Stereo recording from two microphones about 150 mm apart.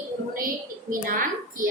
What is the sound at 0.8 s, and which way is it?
Speech, 65° right (ahead or behind).